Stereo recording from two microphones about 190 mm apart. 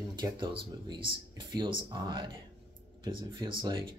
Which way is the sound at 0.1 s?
25° right (ahead or behind).